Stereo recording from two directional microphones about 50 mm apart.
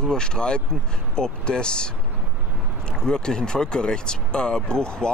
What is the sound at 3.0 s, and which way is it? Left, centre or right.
Speech, centre.